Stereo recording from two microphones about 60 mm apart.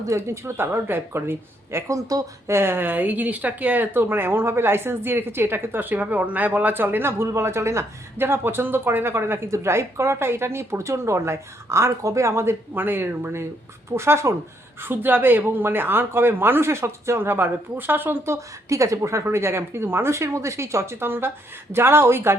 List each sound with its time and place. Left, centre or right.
0.0 s speech: right
1.9 s speech: right
2.5 s speech: right
8.2 s speech: right
14.8 s speech: right
18.3 s speech: right
19.2 s speech: right